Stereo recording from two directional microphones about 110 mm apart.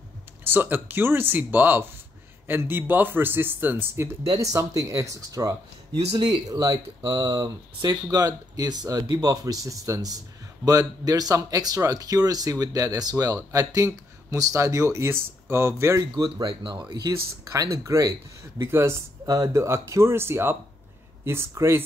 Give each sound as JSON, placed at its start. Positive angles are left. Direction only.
{"t": 0.4, "sound": "speech", "side_deg": -20}
{"t": 16.3, "sound": "speech", "side_deg": -45}